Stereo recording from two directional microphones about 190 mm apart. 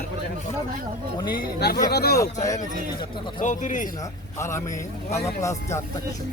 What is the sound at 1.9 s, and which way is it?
Speech, 55° left (ahead or behind).